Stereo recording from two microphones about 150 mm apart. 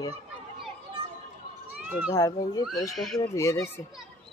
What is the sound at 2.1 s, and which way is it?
Speech, 25° left (ahead or behind).